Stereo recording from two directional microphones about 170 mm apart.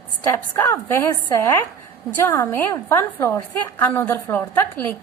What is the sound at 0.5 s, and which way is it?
A woman's voice, 15° left (ahead or behind).